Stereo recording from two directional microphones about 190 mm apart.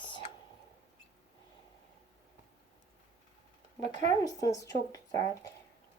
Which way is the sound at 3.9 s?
40° right (ahead or behind).